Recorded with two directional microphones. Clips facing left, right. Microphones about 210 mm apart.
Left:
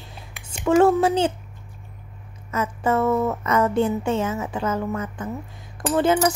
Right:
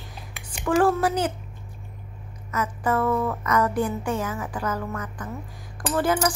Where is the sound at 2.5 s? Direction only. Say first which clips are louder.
Left 3 dB; 25° left (ahead or behind).